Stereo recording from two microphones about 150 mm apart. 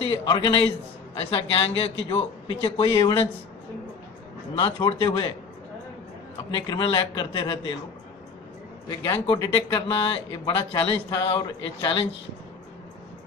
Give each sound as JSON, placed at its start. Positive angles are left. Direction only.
{"t": 0.0, "sound": "speech", "side_deg": 30}
{"t": 4.6, "sound": "speech", "side_deg": 35}
{"t": 6.5, "sound": "speech", "side_deg": 30}
{"t": 9.2, "sound": "speech", "side_deg": 30}